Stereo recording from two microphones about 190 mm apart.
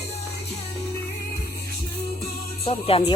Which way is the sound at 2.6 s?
30° left (ahead or behind).